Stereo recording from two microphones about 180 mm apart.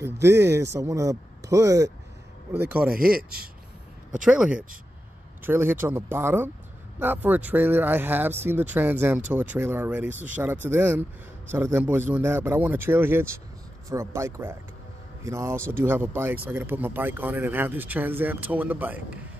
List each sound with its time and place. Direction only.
0.0 s speech: 15° right (ahead or behind)
2.9 s speech: 55° right (ahead or behind)
4.2 s speech: 5° right (ahead or behind)